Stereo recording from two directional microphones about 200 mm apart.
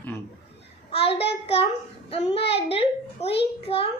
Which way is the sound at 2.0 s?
30° left (ahead or behind).